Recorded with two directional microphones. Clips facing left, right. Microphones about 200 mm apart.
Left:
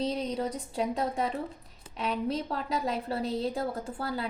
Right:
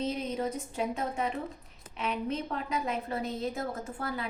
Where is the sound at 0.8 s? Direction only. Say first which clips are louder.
Left 3 dB; 35° left (ahead or behind).